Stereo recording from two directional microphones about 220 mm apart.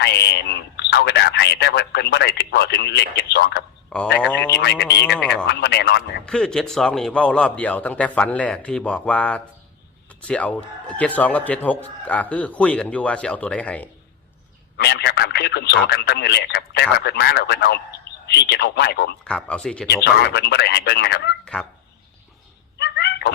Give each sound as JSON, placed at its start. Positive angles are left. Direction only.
{"t": 0.0, "sound": "speech", "side_deg": 50}
{"t": 3.8, "sound": "a man's voice", "side_deg": 5}
{"t": 5.3, "sound": "speech", "side_deg": 50}
{"t": 6.2, "sound": "a man's voice", "side_deg": 5}
{"t": 14.8, "sound": "speech", "side_deg": 50}
{"t": 19.2, "sound": "a man's voice", "side_deg": 5}
{"t": 20.2, "sound": "speech", "side_deg": 50}
{"t": 21.4, "sound": "speech", "side_deg": 5}
{"t": 22.8, "sound": "a sound", "side_deg": 50}